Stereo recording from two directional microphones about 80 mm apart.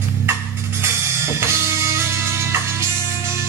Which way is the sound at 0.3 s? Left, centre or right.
Right.